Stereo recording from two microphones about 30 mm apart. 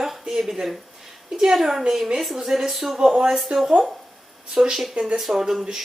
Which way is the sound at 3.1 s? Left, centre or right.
Right.